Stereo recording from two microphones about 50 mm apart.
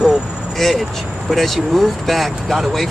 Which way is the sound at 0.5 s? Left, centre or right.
Centre.